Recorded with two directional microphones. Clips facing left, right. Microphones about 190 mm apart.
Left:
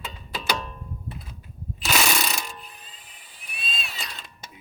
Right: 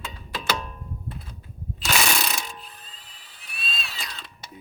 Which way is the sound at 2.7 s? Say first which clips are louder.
Even; 15° left (ahead or behind).